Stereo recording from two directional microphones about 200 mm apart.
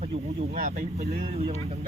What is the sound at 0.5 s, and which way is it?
Speech, 45° right (ahead or behind).